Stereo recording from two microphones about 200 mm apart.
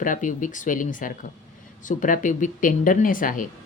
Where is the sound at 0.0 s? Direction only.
40° left (ahead or behind).